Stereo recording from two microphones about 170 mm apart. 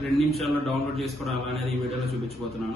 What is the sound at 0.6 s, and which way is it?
Speech, 35° right (ahead or behind).